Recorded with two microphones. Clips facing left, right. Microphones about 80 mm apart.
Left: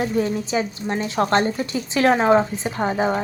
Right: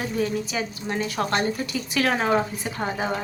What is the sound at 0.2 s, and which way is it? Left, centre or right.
A woman's voice, left.